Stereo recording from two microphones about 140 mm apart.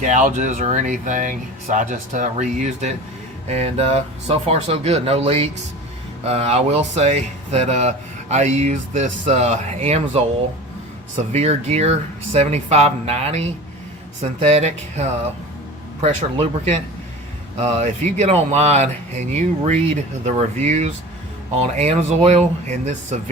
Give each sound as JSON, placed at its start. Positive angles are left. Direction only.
{"t": 0.0, "sound": "speech", "side_deg": -65}